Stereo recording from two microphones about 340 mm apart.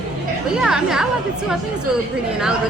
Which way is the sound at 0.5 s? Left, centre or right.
Centre.